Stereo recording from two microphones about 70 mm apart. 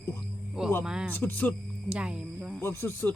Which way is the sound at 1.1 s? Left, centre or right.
Left.